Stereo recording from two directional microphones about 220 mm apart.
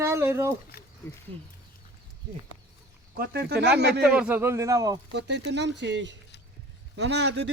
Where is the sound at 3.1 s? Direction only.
45° right (ahead or behind).